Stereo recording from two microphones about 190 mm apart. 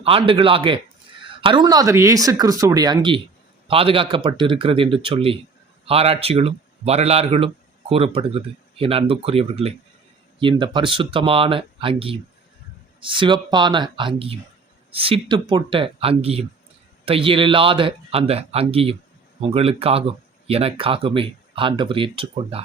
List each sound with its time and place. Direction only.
0.0 s speech: 30° right (ahead or behind)